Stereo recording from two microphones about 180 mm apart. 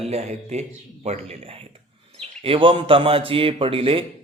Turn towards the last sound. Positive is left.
turn(degrees=-30)  # may be behind; listen again after turning